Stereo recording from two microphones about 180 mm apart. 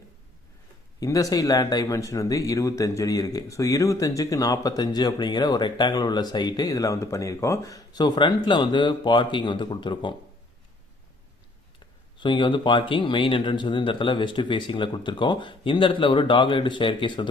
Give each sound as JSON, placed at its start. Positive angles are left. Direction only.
{"t": 0.9, "sound": "speech", "side_deg": 20}
{"t": 12.1, "sound": "speech", "side_deg": 25}